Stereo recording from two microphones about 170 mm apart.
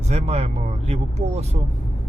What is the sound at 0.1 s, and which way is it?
Speech, 40° right (ahead or behind).